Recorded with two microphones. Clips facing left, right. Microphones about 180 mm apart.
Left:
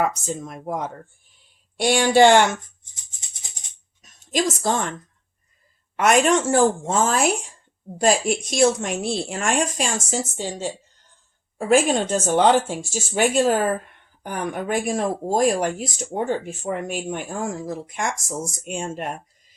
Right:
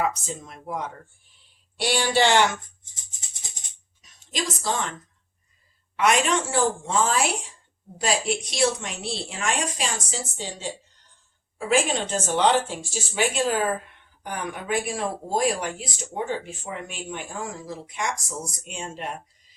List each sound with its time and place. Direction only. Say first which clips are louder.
0.0 s speech: left 3 dB; 50° left (ahead or behind)
1.8 s speech: left 7 dB; 45° left (ahead or behind)
4.0 s a woman's voice: left 8 dB; 50° left (ahead or behind)
6.0 s speech: left 4 dB; 50° left (ahead or behind)
14.8 s speech: left 5 dB; 45° left (ahead or behind)